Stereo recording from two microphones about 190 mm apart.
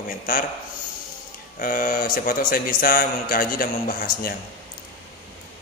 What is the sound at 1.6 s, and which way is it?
A man's voice, 45° left (ahead or behind).